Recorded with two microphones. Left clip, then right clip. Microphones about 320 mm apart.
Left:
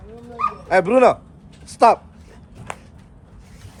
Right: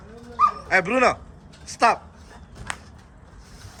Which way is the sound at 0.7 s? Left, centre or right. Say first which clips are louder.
Left 10 dB; centre.